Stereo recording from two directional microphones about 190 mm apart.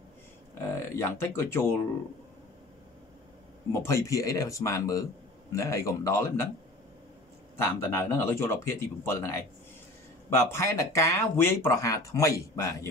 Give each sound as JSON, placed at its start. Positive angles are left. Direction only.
{"t": 0.6, "sound": "speech", "side_deg": 15}
{"t": 3.8, "sound": "speech", "side_deg": 15}
{"t": 7.5, "sound": "speech", "side_deg": 10}
{"t": 10.4, "sound": "speech", "side_deg": 15}